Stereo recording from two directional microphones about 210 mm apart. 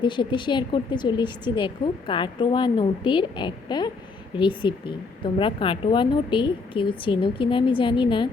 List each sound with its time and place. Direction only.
0.0 s speech: 20° left (ahead or behind)